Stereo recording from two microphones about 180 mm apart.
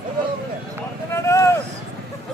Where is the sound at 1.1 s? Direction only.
15° left (ahead or behind).